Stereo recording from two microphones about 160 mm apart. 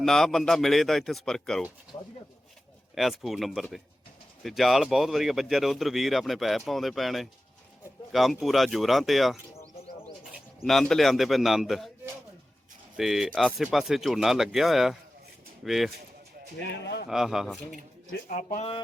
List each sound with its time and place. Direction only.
0.0 s speech: centre (ahead or behind)
2.9 s speech: centre (ahead or behind)
10.6 s speech: centre (ahead or behind)
13.0 s speech: centre (ahead or behind)
16.6 s speech: 90° left
17.1 s speech: 5° right (ahead or behind)
18.3 s speech: 45° left (ahead or behind)